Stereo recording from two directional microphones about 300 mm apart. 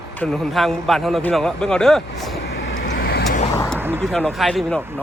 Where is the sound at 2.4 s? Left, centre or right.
Left.